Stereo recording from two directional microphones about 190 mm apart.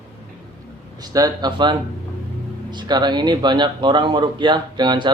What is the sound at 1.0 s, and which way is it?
Speech, 20° right (ahead or behind).